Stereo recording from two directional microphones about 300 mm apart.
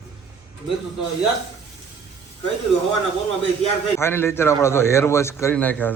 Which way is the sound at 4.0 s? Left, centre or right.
Centre.